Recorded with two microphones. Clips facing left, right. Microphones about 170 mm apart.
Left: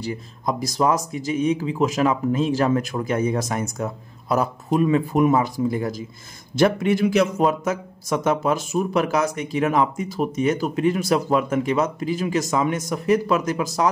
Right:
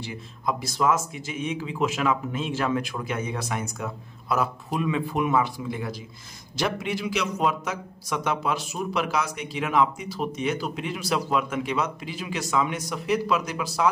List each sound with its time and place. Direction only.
0.0 s a man's voice: 40° left (ahead or behind)